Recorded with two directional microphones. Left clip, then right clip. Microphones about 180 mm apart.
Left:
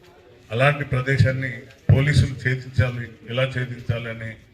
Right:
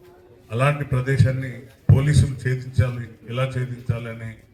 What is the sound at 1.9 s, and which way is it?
A man's voice, 65° right (ahead or behind).